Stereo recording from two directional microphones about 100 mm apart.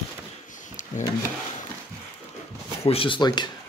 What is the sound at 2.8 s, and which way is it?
Speech, 60° left (ahead or behind).